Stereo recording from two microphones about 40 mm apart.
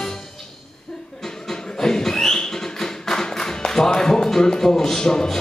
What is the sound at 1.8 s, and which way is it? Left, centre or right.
Tap, centre.